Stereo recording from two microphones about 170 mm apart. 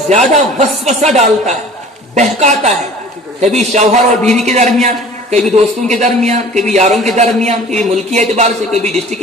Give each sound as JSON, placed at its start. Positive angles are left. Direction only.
{"t": 0.1, "sound": "a man's voice", "side_deg": -40}